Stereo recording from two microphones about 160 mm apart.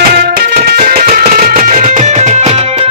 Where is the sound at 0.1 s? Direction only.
65° right (ahead or behind).